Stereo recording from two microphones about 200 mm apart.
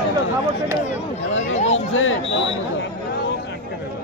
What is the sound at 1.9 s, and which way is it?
Speech, 80° left.